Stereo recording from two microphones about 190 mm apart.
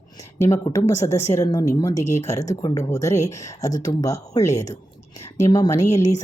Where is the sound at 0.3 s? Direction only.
15° left (ahead or behind).